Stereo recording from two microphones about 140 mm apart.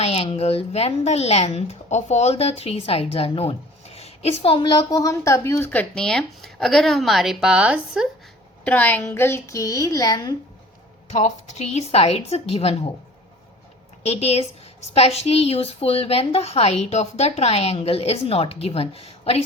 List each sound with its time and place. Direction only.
0.0 s speech: 45° left (ahead or behind); by 5.8 s 15° left (ahead or behind)
5.9 s speech: 5° left (ahead or behind)
8.6 s a woman's voice: 10° left (ahead or behind); by 10.3 s 25° left (ahead or behind)
11.1 s speech: 50° left (ahead or behind)
14.0 s speech: 50° left (ahead or behind)